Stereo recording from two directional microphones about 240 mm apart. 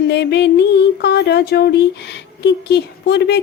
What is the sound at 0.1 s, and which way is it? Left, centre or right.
Speech, left.